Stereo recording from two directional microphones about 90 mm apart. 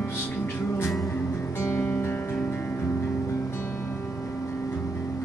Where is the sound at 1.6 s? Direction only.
25° left (ahead or behind).